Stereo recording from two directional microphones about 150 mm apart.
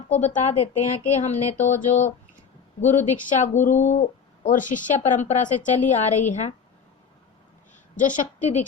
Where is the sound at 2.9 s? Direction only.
55° left (ahead or behind).